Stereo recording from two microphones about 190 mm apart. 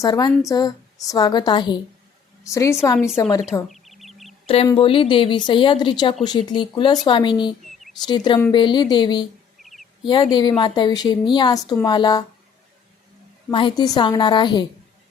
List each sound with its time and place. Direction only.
0.0 s a woman's voice: 20° left (ahead or behind)
3.4 s bird: centre (ahead or behind)
4.4 s a woman's voice: 30° left (ahead or behind)
9.6 s a sound: centre (ahead or behind)
10.0 s a woman's voice: 25° left (ahead or behind)
13.5 s a woman's voice: 25° left (ahead or behind)